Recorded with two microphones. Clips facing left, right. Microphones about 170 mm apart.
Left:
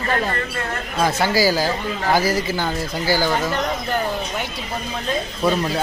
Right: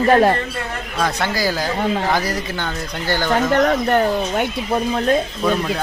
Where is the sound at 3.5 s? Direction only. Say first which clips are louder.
Right 7 dB; 65° right (ahead or behind).